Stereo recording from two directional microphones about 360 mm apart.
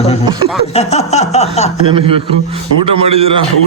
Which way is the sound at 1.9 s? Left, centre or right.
Centre.